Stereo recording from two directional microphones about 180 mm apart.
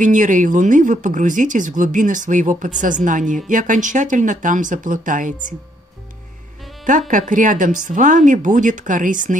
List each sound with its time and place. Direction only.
0.0 s speech: 45° right (ahead or behind)
6.8 s speech: 45° right (ahead or behind)